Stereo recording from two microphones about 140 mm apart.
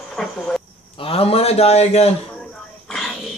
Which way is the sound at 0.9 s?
40° left (ahead or behind).